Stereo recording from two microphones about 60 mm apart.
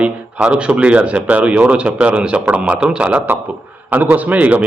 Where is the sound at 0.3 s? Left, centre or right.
Centre.